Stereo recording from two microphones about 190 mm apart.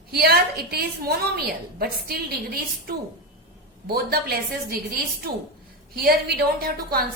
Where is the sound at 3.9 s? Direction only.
55° right (ahead or behind).